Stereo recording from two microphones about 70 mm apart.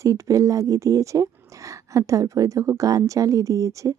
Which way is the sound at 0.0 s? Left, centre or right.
Right.